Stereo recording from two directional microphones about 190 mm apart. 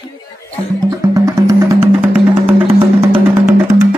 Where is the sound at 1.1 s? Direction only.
15° right (ahead or behind).